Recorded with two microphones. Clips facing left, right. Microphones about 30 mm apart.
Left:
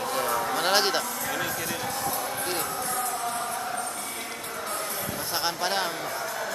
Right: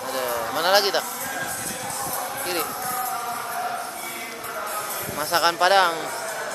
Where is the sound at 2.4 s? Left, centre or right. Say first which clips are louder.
Right 3 dB; right.